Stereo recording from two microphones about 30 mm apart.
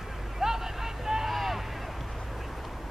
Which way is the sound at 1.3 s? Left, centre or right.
Centre.